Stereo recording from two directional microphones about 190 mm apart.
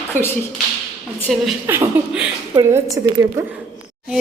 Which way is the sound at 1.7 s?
5° right (ahead or behind).